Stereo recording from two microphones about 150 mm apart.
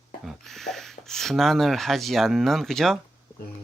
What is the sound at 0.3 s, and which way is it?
Speech, centre (ahead or behind).